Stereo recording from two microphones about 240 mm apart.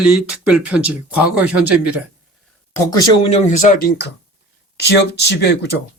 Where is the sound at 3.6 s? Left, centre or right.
Left.